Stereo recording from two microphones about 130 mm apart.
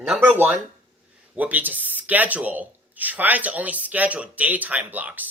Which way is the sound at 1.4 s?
10° right (ahead or behind).